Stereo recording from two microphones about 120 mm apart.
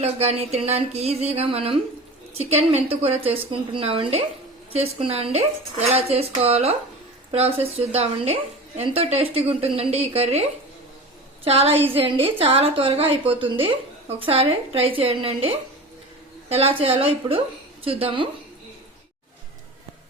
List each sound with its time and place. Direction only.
0.0 s a woman's voice: 60° right (ahead or behind)
11.4 s a woman's voice: 55° right (ahead or behind)